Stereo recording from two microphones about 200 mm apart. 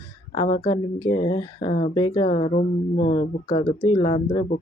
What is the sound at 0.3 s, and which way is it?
Speech, 25° left (ahead or behind).